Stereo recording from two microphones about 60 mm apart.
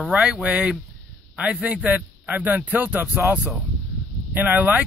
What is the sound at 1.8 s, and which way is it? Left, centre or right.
Speech, right.